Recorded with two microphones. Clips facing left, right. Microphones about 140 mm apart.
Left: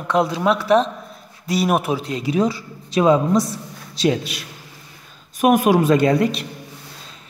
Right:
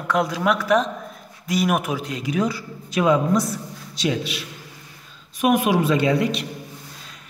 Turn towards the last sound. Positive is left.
turn(degrees=45)  # may be behind; listen again after turning